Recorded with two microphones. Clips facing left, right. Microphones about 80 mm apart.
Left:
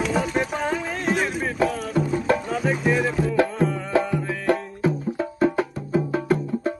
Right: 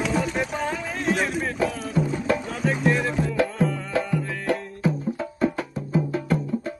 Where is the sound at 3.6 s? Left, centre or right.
Left.